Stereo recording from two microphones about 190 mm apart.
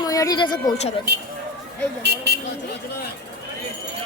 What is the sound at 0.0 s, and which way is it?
Speech, 20° left (ahead or behind).